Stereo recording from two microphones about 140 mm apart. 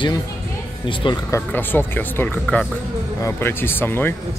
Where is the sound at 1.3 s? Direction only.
15° left (ahead or behind).